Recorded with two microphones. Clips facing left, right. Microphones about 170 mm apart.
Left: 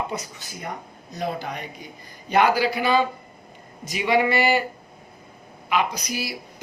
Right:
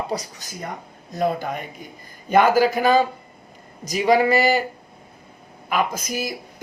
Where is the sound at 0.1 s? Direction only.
35° right (ahead or behind).